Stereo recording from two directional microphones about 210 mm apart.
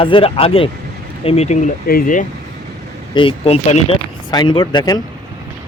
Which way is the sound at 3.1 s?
25° left (ahead or behind).